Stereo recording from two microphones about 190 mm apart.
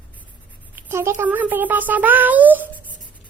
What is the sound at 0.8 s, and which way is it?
Speech, 15° right (ahead or behind).